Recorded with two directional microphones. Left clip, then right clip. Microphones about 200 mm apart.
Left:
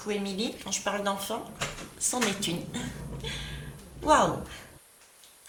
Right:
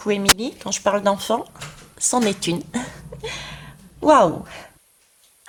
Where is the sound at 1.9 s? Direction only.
45° right (ahead or behind).